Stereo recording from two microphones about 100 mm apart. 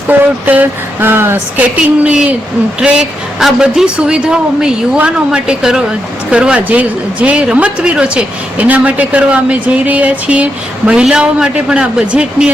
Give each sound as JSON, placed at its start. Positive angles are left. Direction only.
{"t": 0.1, "sound": "speech", "side_deg": -15}